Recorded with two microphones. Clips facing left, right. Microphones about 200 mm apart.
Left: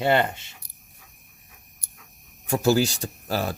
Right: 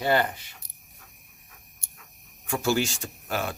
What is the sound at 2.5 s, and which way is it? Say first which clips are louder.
Speech: left 5 dB; 40° left (ahead or behind).